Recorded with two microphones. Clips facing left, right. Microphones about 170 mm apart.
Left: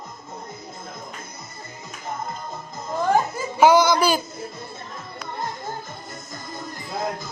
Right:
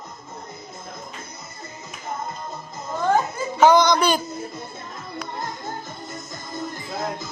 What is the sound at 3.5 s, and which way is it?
Music, 10° left (ahead or behind).